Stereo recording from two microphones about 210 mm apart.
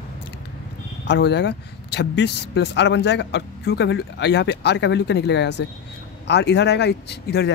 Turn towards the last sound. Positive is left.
turn(degrees=55)  # may be behind; listen again after turning